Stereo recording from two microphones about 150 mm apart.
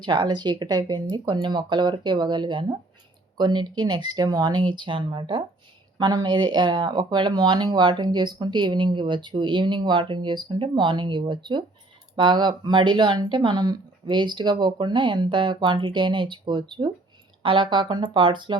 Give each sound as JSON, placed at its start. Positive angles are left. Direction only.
{"t": 0.0, "sound": "speech", "side_deg": -30}